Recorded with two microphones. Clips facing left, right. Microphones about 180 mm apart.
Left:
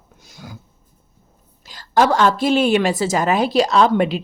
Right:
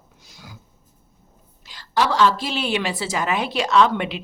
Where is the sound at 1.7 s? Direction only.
45° left (ahead or behind).